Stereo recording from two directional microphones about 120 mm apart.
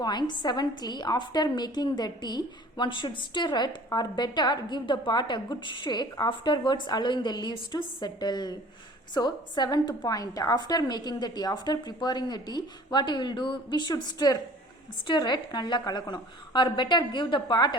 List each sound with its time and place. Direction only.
0.0 s a woman's voice: 35° left (ahead or behind)